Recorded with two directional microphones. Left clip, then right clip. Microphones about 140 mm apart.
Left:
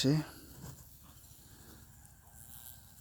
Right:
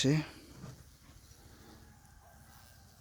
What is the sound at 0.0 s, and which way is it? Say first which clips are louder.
Speech: right 1 dB; 15° right (ahead or behind).